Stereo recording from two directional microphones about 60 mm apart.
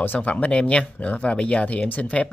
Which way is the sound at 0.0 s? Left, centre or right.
Left.